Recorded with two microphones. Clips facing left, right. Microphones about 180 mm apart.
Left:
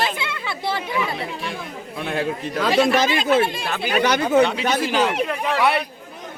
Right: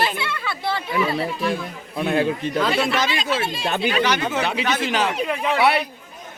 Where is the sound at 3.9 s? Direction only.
40° left (ahead or behind).